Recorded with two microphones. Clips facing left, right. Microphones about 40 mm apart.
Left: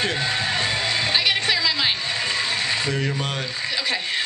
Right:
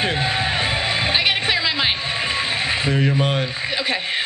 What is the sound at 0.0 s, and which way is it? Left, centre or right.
Music, right.